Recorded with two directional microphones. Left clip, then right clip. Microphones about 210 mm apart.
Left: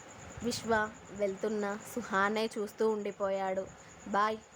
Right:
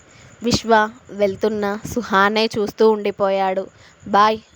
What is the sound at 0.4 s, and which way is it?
A woman's voice, 40° right (ahead or behind).